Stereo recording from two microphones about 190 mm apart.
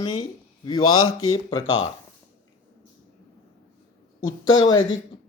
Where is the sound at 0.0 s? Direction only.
20° left (ahead or behind).